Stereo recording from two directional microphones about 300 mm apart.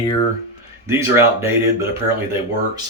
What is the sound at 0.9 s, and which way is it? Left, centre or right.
Speech, centre.